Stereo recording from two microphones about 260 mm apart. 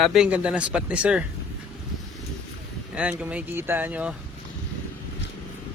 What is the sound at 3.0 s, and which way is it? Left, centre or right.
Speech, centre.